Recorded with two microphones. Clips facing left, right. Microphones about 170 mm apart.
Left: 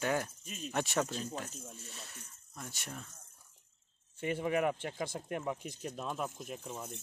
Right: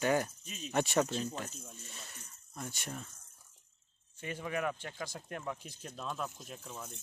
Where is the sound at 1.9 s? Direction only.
Centre (ahead or behind).